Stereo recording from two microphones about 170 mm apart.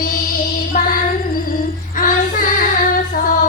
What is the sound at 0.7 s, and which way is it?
Music, 50° left (ahead or behind).